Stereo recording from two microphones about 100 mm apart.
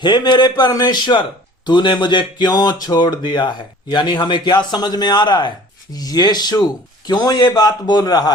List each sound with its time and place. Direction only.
0.0 s speech: 45° left (ahead or behind)